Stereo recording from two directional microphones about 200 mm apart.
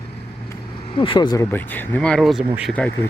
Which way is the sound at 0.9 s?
25° left (ahead or behind).